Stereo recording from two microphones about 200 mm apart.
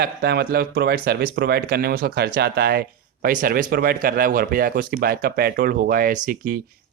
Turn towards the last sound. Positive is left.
turn(degrees=-45)  # may be behind; listen again after turning